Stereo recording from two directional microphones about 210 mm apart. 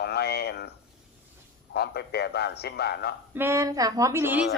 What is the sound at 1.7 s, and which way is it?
A man's voice, 50° left (ahead or behind).